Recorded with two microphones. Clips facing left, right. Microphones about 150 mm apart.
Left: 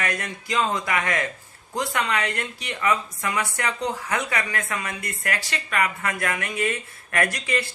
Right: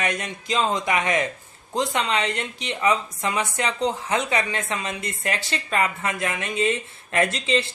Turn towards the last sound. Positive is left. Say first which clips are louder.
# right 3 dB
turn(degrees=-25)  # may be behind; listen again after turning